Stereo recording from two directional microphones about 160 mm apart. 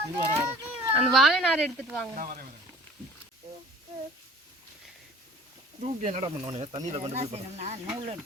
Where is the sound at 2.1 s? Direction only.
60° right (ahead or behind).